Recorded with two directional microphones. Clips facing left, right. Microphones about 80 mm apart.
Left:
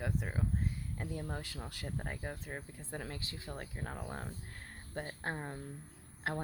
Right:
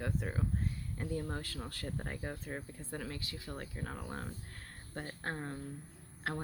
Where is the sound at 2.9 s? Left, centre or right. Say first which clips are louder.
Right 1 dB; left.